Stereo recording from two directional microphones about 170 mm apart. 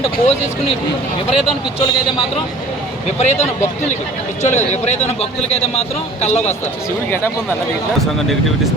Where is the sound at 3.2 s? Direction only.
40° left (ahead or behind).